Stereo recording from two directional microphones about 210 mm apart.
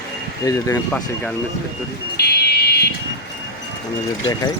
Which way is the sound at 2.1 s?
50° left (ahead or behind).